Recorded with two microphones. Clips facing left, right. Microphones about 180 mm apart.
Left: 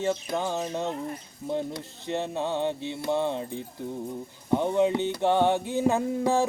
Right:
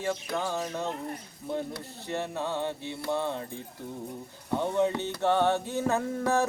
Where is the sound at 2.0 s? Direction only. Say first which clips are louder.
Left 3 dB; 20° left (ahead or behind).